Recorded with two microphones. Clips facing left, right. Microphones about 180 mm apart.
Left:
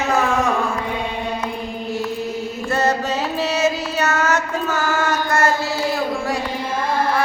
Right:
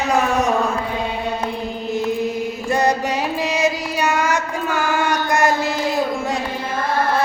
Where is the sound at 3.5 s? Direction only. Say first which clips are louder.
Even; 15° right (ahead or behind).